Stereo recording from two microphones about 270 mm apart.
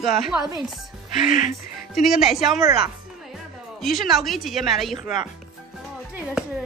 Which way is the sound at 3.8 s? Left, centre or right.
Centre.